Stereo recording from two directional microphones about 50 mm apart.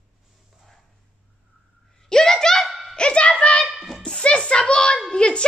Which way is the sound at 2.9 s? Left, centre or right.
Left.